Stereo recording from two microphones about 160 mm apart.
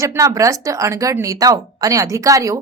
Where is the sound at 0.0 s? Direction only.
20° right (ahead or behind).